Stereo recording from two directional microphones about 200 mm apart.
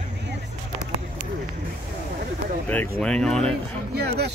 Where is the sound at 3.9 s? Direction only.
55° right (ahead or behind).